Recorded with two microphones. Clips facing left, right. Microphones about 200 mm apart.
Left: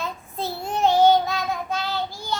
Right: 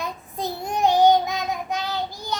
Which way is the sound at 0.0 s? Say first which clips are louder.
Even; 15° right (ahead or behind).